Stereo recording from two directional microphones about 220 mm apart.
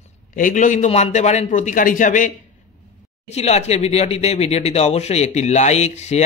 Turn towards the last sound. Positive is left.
turn(degrees=30)  # may be behind; listen again after turning